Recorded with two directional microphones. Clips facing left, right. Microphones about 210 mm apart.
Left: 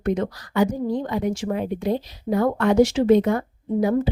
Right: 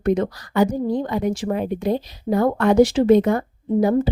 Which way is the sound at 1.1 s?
40° right (ahead or behind).